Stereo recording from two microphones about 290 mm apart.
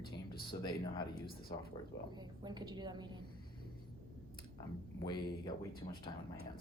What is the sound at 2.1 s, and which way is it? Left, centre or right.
A woman's voice, centre.